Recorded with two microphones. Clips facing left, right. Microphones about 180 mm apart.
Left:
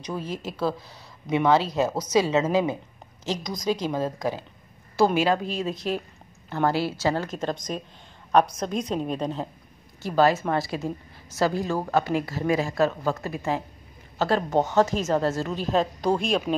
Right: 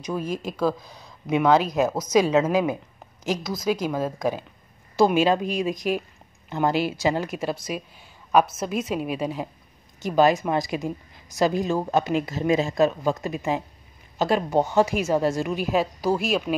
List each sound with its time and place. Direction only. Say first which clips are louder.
0.0 s speech: right 3 dB; 10° right (ahead or behind)